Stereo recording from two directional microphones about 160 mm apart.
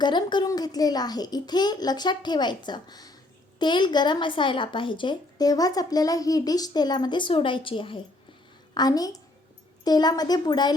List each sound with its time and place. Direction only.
0.0 s a woman's voice: 30° left (ahead or behind)